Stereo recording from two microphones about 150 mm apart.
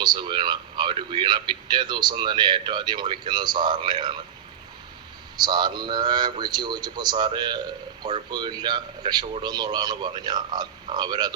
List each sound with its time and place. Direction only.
0.0 s speech: 30° right (ahead or behind)
5.4 s a man's voice: 30° right (ahead or behind)